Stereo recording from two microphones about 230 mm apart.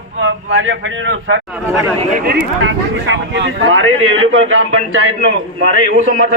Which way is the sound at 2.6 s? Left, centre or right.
Right.